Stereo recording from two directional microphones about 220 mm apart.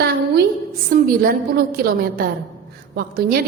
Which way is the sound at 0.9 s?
40° right (ahead or behind).